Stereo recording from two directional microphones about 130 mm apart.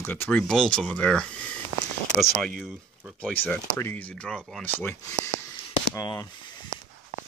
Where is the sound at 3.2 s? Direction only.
10° left (ahead or behind).